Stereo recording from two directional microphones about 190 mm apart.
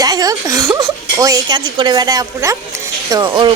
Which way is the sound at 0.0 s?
20° right (ahead or behind).